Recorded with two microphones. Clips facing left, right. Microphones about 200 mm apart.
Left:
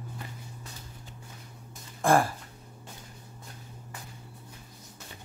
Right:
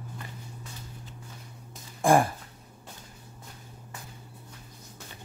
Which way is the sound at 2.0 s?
15° right (ahead or behind).